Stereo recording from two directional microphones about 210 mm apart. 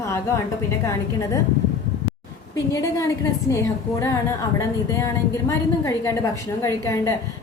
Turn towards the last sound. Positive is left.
turn(degrees=15)  # may be behind; listen again after turning